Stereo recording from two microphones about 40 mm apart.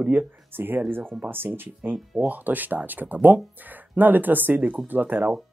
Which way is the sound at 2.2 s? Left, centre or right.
Right.